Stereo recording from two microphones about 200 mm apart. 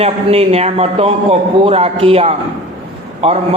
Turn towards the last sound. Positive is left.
turn(degrees=-30)  # may be behind; listen again after turning